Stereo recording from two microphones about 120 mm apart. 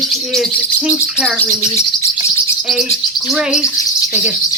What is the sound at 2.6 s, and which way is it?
Speech, centre (ahead or behind).